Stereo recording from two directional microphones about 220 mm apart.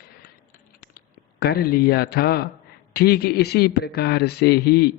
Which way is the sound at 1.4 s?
45° left (ahead or behind).